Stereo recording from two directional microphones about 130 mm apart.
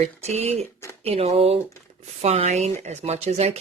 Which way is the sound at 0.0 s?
55° right (ahead or behind).